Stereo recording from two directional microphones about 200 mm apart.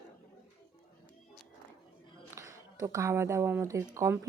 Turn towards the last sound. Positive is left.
turn(degrees=-15)  # may be behind; listen again after turning